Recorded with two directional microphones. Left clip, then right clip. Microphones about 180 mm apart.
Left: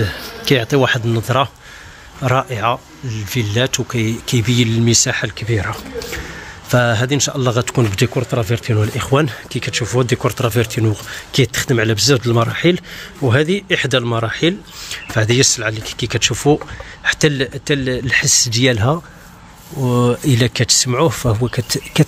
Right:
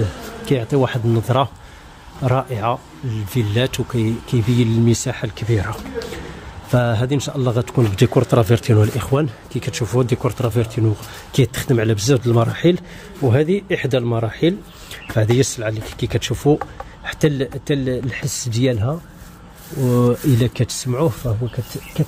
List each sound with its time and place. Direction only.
0.0 s speech: 5° left (ahead or behind)
6.7 s speech: centre (ahead or behind)
8.0 s speech: 25° right (ahead or behind)
9.1 s speech: 10° left (ahead or behind)
9.6 s speech: 10° right (ahead or behind)
9.9 s speech: centre (ahead or behind)
11.3 s speech: 5° right (ahead or behind)
19.8 s speech: centre (ahead or behind)
21.3 s speech: 30° left (ahead or behind)